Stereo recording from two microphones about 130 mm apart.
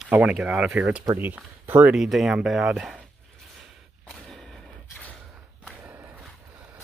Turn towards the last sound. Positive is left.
turn(degrees=-15)  # may be behind; listen again after turning